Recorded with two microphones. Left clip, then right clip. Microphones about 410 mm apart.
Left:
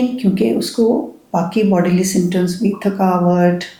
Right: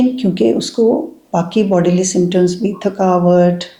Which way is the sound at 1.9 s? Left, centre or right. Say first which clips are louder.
Right 3 dB; right.